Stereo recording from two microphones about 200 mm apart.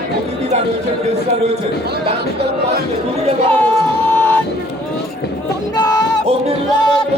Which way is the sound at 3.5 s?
10° left (ahead or behind).